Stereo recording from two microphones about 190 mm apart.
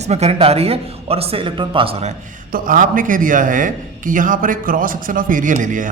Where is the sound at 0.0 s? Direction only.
35° right (ahead or behind).